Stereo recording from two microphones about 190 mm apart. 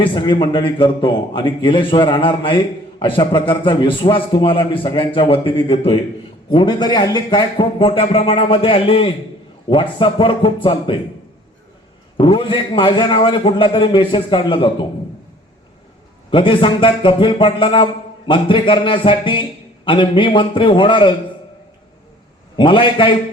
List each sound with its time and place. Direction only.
0.0 s a man's voice: 25° left (ahead or behind)
12.1 s a man's voice: 25° left (ahead or behind)
16.3 s a man's voice: 25° left (ahead or behind)
22.5 s a man's voice: 25° left (ahead or behind)